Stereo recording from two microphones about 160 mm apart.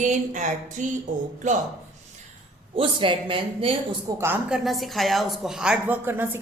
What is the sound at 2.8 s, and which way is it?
Speech, 30° right (ahead or behind).